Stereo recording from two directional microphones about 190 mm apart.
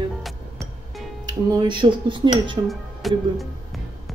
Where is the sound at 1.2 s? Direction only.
20° right (ahead or behind).